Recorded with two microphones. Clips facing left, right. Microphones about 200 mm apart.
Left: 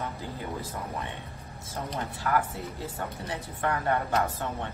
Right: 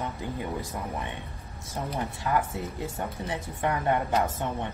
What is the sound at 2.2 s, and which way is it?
A woman's voice, 20° right (ahead or behind).